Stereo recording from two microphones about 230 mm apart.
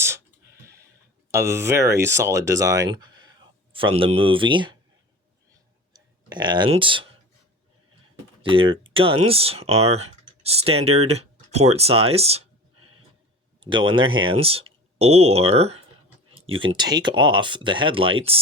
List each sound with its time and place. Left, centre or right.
1.3 s speech: centre
5.9 s speech: centre
8.4 s speech: right
13.6 s speech: right